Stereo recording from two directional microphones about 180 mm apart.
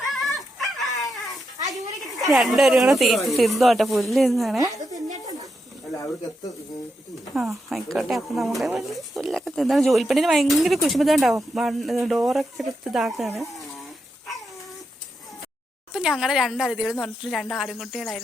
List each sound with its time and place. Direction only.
0.0 s dog: centre (ahead or behind)
1.7 s speech: centre (ahead or behind)
5.9 s speech: 20° left (ahead or behind)
7.3 s speech: centre (ahead or behind)
15.9 s speech: 5° right (ahead or behind)